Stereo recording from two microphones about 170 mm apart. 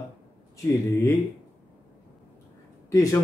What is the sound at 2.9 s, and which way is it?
Speech, 15° left (ahead or behind).